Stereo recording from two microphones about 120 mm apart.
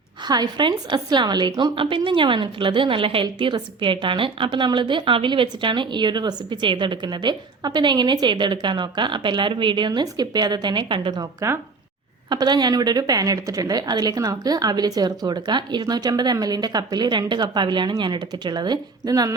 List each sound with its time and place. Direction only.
0.3 s a woman's voice: 35° right (ahead or behind)
12.3 s a woman's voice: 35° right (ahead or behind)